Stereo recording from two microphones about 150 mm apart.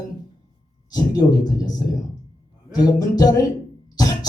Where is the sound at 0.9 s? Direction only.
25° left (ahead or behind).